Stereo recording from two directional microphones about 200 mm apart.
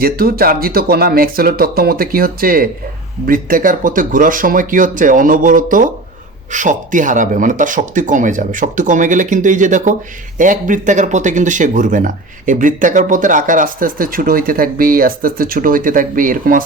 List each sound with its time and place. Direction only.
0.0 s speech: 50° right (ahead or behind)